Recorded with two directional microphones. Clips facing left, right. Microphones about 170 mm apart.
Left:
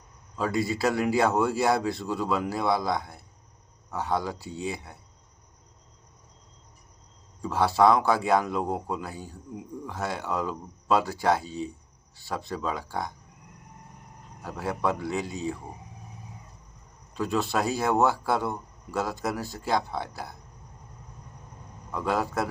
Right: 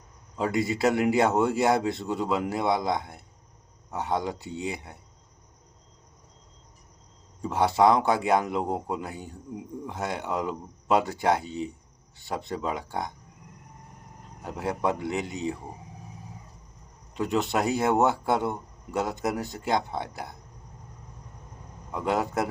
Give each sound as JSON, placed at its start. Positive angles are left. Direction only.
{"t": 0.3, "sound": "a man's voice", "side_deg": -20}
{"t": 7.4, "sound": "a man's voice", "side_deg": -20}
{"t": 14.4, "sound": "a man's voice", "side_deg": -20}
{"t": 17.2, "sound": "a man's voice", "side_deg": -20}
{"t": 21.9, "sound": "a man's voice", "side_deg": -20}